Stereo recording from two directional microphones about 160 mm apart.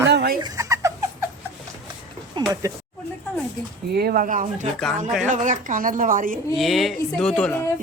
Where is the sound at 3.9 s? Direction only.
75° right (ahead or behind); by 6.4 s 55° right (ahead or behind).